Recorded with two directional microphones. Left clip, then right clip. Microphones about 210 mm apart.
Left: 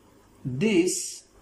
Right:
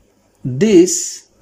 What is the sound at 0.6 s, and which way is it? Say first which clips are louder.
Speech: right 13 dB; 55° right (ahead or behind).